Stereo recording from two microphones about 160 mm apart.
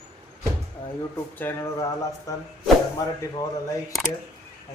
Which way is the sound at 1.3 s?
15° left (ahead or behind).